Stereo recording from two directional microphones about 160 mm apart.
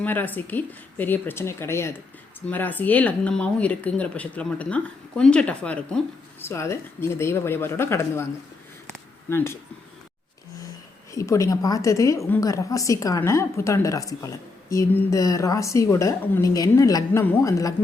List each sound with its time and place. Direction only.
0.0 s speech: 10° left (ahead or behind)
9.3 s speech: 15° left (ahead or behind)
11.1 s a woman's voice: 20° left (ahead or behind)